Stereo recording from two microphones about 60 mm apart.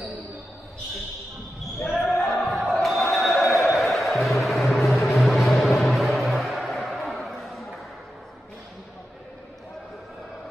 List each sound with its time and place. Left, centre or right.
1.9 s basketball bounce: centre
2.7 s a sound: centre
3.6 s music: centre